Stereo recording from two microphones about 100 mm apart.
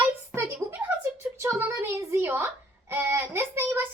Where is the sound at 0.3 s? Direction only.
20° right (ahead or behind).